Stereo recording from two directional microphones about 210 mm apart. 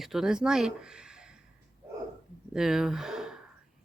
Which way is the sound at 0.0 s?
Centre (ahead or behind).